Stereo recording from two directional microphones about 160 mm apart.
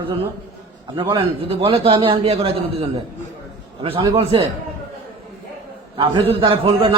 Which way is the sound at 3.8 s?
35° right (ahead or behind).